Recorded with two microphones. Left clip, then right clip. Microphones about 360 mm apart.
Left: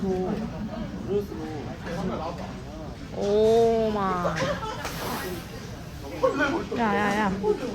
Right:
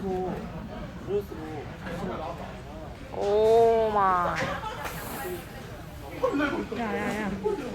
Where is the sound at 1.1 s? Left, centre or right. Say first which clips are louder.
Left 2 dB; right.